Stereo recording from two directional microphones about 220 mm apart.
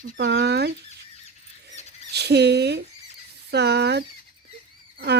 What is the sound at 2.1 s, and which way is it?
Speech, 50° right (ahead or behind).